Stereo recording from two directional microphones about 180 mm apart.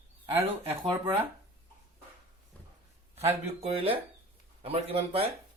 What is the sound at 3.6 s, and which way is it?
Speech, 30° right (ahead or behind).